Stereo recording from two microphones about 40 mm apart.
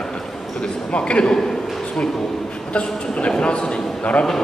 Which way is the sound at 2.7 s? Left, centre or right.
Left.